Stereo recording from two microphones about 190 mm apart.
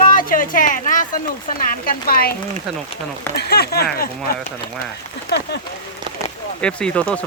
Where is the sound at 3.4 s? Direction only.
55° left (ahead or behind).